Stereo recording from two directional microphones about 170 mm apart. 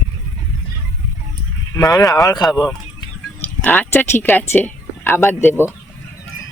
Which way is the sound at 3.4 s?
10° left (ahead or behind).